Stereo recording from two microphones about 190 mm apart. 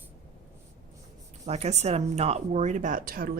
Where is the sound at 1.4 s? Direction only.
35° right (ahead or behind).